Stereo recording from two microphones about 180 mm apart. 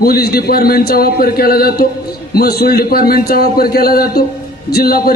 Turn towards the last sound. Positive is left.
turn(degrees=55)  # may be behind; listen again after turning